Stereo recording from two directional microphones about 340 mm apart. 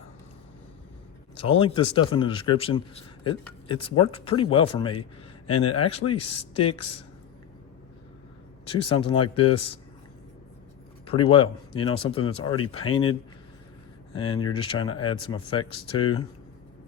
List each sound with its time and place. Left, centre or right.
1.4 s speech: centre
5.5 s a man's voice: left
6.1 s speech: centre
8.6 s speech: centre
11.0 s speech: centre